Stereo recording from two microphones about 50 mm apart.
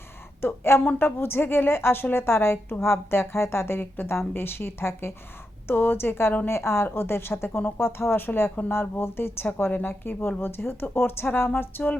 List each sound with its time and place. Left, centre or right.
0.4 s speech: left
0.9 s a woman's voice: left